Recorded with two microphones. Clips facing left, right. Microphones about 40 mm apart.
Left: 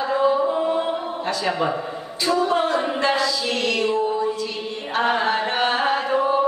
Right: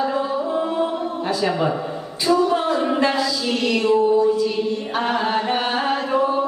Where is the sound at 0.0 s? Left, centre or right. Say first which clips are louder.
Left 3 dB; centre.